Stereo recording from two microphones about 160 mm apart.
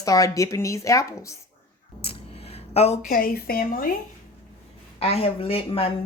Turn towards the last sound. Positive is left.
turn(degrees=35)  # may be behind; listen again after turning